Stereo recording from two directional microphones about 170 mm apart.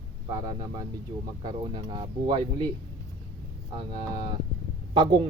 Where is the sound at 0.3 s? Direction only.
20° right (ahead or behind).